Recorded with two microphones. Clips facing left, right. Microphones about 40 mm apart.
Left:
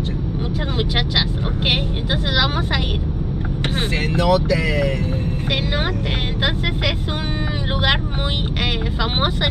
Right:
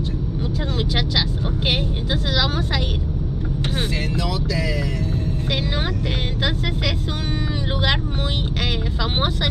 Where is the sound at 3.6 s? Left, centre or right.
Left.